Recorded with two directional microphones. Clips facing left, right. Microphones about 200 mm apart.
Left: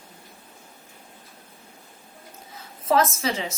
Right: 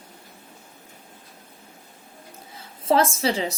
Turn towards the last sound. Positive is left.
turn(degrees=-35)  # may be behind; listen again after turning